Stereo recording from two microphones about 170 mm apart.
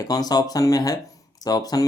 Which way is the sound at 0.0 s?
20° left (ahead or behind).